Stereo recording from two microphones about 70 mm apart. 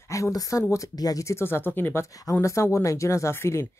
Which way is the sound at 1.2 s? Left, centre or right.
Left.